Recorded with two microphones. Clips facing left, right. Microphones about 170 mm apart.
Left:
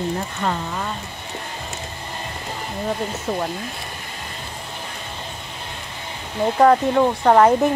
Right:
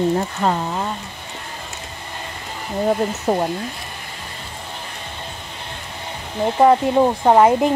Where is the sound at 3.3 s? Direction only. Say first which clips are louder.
Right 6 dB; 40° right (ahead or behind).